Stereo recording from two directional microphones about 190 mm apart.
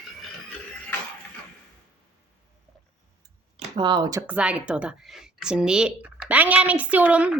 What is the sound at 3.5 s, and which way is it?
Speech, 25° right (ahead or behind).